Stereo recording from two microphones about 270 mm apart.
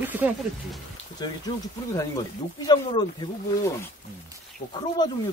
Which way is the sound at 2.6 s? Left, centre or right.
Centre.